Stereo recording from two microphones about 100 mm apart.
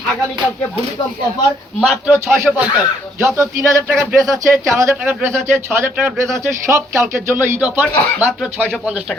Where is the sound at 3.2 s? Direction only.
30° right (ahead or behind).